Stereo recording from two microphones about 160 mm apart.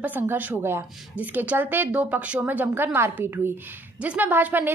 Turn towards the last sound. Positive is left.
turn(degrees=-10)  # may be behind; listen again after turning